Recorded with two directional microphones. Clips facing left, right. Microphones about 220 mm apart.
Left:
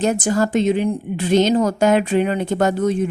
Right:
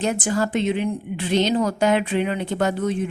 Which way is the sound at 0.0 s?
40° left (ahead or behind).